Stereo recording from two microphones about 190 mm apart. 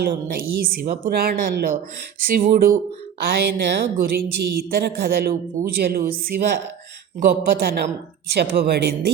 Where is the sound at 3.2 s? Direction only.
60° right (ahead or behind).